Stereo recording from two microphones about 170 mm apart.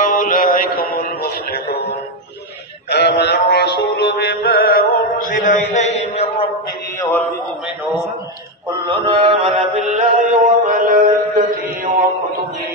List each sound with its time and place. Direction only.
0.0 s mantra: 50° left (ahead or behind)
0.7 s a sound: 60° left (ahead or behind)
1.2 s a man's voice: 65° left (ahead or behind)
2.9 s synthetic singing: 75° left (ahead or behind); by 5.6 s 55° left (ahead or behind)
5.7 s mantra: 45° left (ahead or behind)
8.8 s mantra: 30° right (ahead or behind)
9.8 s mantra: 45° right (ahead or behind)